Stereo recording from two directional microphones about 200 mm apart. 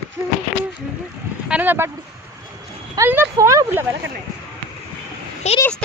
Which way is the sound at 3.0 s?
15° right (ahead or behind).